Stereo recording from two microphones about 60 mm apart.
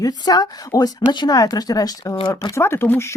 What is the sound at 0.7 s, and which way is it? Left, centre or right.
Speech, left.